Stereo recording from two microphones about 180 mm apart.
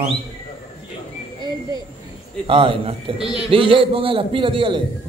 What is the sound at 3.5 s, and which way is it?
A man's voice, 30° right (ahead or behind).